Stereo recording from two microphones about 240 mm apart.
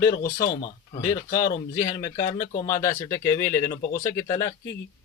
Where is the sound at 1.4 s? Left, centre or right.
Centre.